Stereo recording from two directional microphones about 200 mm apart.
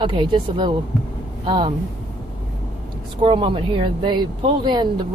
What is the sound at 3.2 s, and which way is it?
Speech, 25° right (ahead or behind).